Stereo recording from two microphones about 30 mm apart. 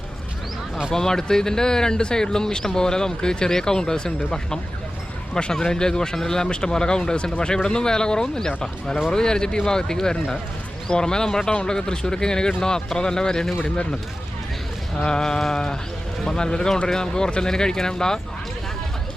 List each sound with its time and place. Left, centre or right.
0.9 s speech: centre
14.9 s speech: left